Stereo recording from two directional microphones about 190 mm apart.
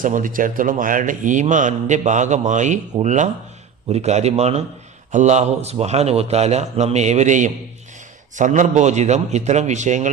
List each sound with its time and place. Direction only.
0.0 s speech: 45° right (ahead or behind)